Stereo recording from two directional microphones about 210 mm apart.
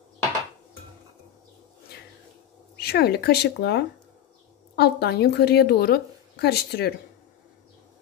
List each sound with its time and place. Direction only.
2.8 s a woman's voice: 50° left (ahead or behind)